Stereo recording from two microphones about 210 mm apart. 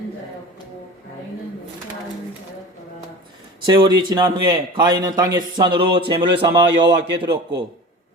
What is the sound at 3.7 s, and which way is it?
A man's voice, 20° right (ahead or behind).